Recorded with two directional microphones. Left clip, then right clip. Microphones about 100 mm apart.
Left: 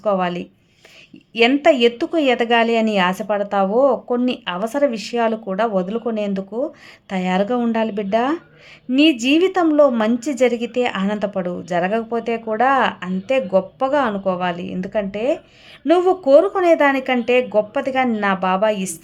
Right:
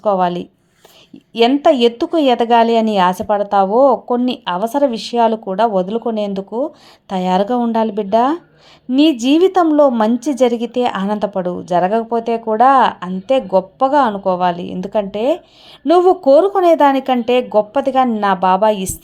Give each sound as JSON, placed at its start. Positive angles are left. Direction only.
{"t": 0.0, "sound": "a woman's voice", "side_deg": -15}